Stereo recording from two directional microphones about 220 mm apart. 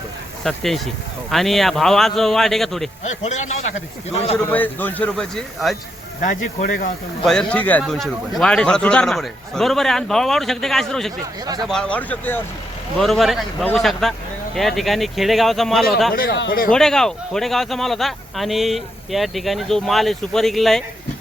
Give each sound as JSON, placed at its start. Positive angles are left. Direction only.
{"t": 0.4, "sound": "speech", "side_deg": 0}
{"t": 3.2, "sound": "a man's voice", "side_deg": 30}
{"t": 4.4, "sound": "speech", "side_deg": 10}
{"t": 6.2, "sound": "a man's voice", "side_deg": 35}
{"t": 7.3, "sound": "speech", "side_deg": 5}
{"t": 16.1, "sound": "speech", "side_deg": 45}
{"t": 16.7, "sound": "speech", "side_deg": 0}